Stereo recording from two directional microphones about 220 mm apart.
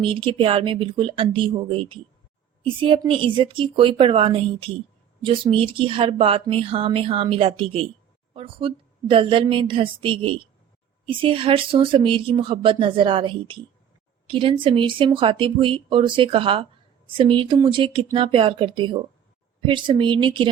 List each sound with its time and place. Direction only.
0.0 s speech: 25° right (ahead or behind)